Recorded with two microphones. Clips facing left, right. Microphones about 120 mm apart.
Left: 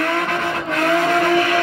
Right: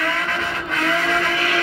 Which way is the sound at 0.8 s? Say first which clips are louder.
Left 5 dB; 45° left (ahead or behind).